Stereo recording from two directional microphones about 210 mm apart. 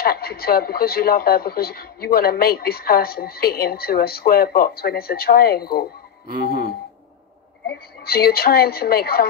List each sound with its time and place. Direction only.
0.0 s speech: 45° left (ahead or behind)
6.3 s speech: 45° right (ahead or behind)
7.6 s speech: 45° left (ahead or behind)